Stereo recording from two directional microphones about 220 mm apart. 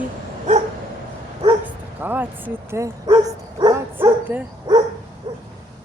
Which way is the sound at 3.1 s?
15° right (ahead or behind).